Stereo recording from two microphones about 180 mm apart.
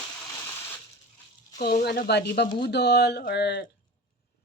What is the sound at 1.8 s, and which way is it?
Speech, 65° left (ahead or behind).